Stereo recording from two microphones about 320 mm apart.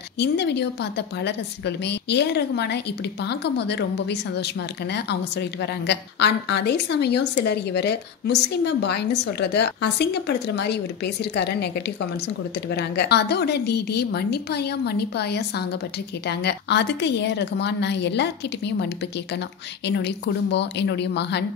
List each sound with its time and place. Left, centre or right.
0.2 s a woman's voice: left
19.9 s a woman's voice: left